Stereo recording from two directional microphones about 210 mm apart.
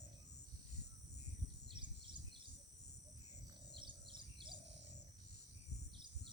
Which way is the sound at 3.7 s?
25° right (ahead or behind).